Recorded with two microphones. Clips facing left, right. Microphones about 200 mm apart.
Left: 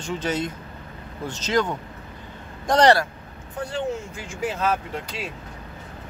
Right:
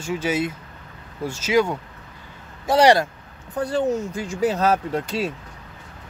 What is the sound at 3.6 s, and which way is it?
Speech, 40° right (ahead or behind).